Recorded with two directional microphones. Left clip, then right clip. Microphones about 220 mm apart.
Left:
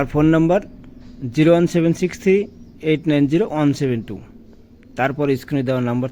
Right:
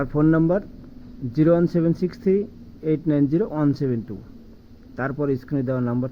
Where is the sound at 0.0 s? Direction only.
35° left (ahead or behind).